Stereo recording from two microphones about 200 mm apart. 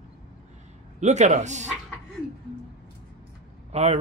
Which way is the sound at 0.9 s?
35° right (ahead or behind).